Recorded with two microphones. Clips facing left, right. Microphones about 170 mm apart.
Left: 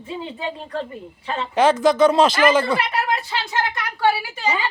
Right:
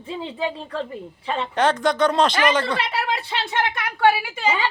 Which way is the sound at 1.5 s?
5° left (ahead or behind).